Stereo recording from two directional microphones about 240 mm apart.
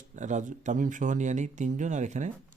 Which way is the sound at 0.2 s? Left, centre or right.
Right.